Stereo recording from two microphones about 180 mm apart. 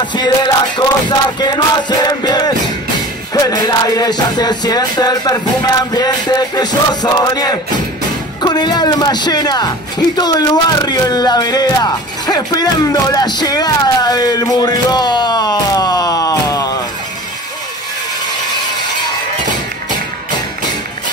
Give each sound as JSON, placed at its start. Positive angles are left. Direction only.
{"t": 0.0, "sound": "music", "side_deg": 25}
{"t": 1.4, "sound": "speech", "side_deg": 25}